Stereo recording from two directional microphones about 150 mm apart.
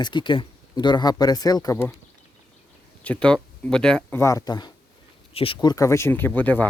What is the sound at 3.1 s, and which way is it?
Speech, 5° left (ahead or behind).